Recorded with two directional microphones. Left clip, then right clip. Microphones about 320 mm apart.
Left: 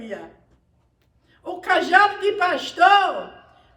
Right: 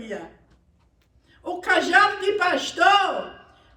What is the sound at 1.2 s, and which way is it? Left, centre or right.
A woman's voice, centre.